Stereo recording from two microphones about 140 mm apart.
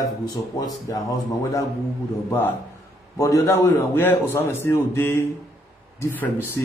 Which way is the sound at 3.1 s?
20° left (ahead or behind).